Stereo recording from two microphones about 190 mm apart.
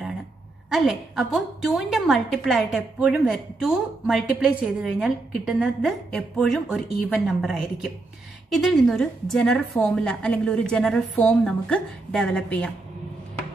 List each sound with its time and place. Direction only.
0.7 s a woman's voice: centre (ahead or behind)